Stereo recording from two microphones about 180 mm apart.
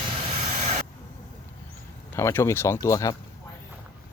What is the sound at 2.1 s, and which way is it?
Speech, 15° left (ahead or behind).